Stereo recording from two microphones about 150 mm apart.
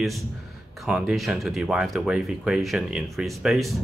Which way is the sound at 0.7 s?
5° right (ahead or behind).